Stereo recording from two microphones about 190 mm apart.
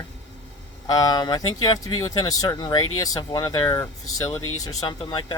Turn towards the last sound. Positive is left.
turn(degrees=25)  # may be behind; listen again after turning